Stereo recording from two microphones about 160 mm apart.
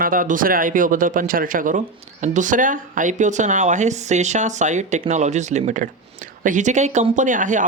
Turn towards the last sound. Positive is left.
turn(degrees=-55)  # may be behind; listen again after turning